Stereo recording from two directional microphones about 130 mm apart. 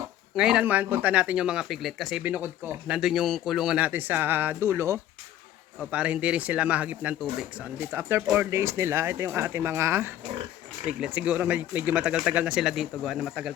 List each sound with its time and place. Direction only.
0.3 s speech: 5° right (ahead or behind); by 4.9 s 20° right (ahead or behind)
5.9 s speech: 10° right (ahead or behind)
10.8 s speech: 10° right (ahead or behind)